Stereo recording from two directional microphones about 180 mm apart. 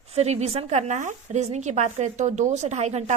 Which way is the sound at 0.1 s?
35° right (ahead or behind).